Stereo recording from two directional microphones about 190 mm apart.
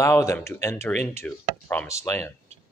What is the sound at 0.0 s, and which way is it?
Speech, 15° left (ahead or behind).